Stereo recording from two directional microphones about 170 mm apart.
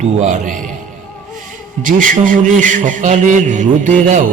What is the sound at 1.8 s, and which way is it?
A man's voice, 50° right (ahead or behind).